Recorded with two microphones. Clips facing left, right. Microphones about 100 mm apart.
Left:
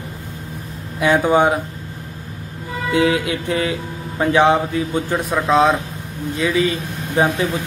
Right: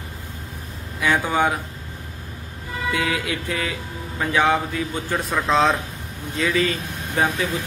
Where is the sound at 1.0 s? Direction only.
25° left (ahead or behind).